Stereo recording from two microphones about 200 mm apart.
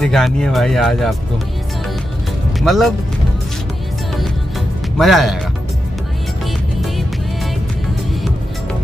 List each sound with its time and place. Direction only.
0.0 s speech: centre (ahead or behind)
2.6 s speech: centre (ahead or behind)
4.2 s music: centre (ahead or behind)
6.4 s music: centre (ahead or behind)